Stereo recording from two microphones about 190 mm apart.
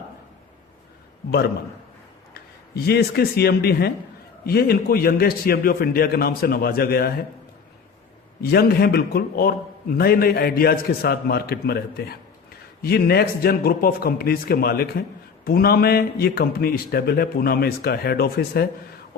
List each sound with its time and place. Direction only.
2.3 s a man's voice: 55° left (ahead or behind)
8.4 s a man's voice: 55° left (ahead or behind)